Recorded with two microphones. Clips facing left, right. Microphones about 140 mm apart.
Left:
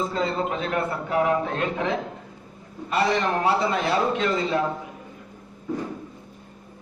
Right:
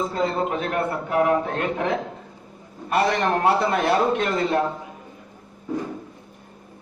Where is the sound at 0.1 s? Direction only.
55° right (ahead or behind).